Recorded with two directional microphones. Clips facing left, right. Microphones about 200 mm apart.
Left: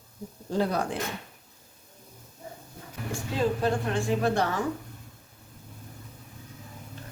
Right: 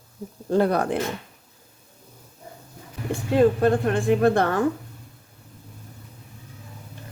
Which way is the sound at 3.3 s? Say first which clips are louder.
Right 8 dB; 55° right (ahead or behind).